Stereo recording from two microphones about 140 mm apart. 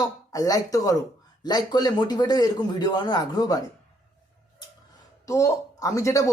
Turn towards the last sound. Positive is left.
turn(degrees=20)  # may be behind; listen again after turning